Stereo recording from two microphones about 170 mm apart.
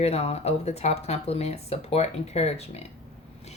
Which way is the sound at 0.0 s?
35° left (ahead or behind).